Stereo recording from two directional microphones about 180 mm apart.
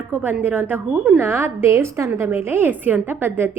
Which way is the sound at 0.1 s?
10° right (ahead or behind).